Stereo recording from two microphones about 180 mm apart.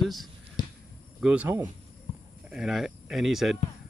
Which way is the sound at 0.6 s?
25° left (ahead or behind).